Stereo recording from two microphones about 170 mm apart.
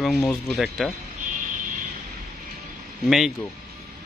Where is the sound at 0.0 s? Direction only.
Centre (ahead or behind).